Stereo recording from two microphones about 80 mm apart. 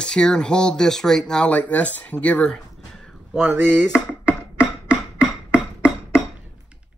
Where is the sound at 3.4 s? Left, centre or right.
Right.